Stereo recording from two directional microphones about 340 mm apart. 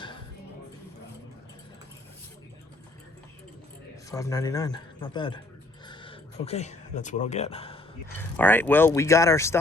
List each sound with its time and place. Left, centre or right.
4.1 s speech: centre
5.8 s a sound: centre
8.2 s speech: centre